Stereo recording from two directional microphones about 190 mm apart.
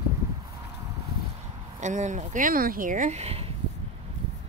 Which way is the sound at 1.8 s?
40° right (ahead or behind).